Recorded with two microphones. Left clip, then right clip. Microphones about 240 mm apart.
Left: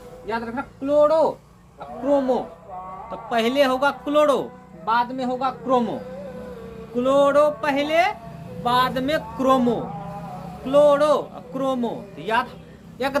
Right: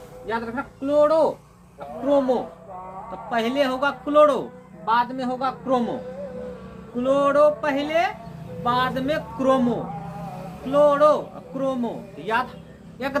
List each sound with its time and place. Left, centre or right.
0.3 s a man's voice: centre
3.1 s a man's voice: left
6.9 s a man's voice: left